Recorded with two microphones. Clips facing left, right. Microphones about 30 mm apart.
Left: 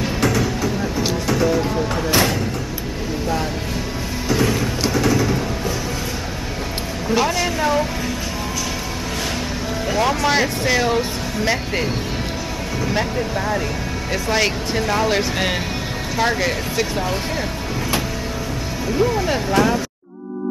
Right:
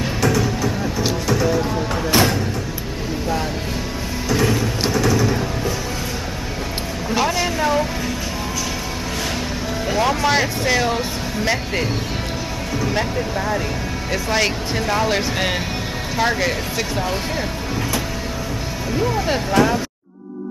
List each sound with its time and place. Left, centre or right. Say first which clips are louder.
7.1 s speech: left 1 dB; centre
9.8 s speech: even; centre
12.9 s speech: left 2 dB; centre
18.9 s speech: left 2 dB; centre